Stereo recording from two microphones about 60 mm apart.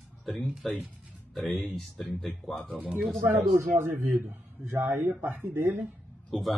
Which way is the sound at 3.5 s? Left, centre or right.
Right.